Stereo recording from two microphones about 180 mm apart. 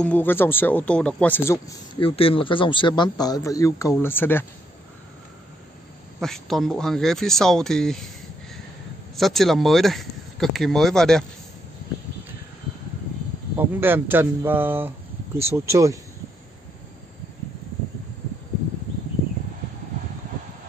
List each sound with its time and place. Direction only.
0.0 s speech: 10° left (ahead or behind)
2.0 s a man's voice: 30° left (ahead or behind); by 4.5 s 10° left (ahead or behind)
6.1 s speech: centre (ahead or behind)
9.1 s speech: centre (ahead or behind)
13.6 s speech: 10° right (ahead or behind)